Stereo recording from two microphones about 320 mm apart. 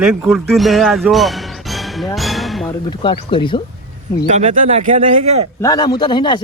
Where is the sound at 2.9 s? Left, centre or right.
Centre.